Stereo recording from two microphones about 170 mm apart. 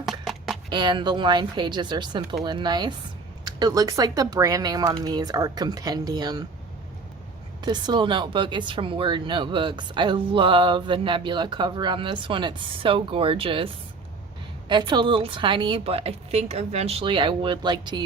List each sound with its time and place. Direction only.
0.0 s a sound: centre (ahead or behind)
0.7 s speech: 25° right (ahead or behind)
7.6 s speech: 25° right (ahead or behind)
14.7 s speech: 25° right (ahead or behind)